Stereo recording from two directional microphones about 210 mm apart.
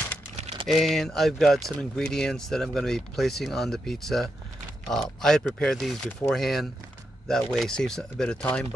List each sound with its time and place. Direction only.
0.4 s typing: 30° right (ahead or behind)
0.7 s speech: centre (ahead or behind)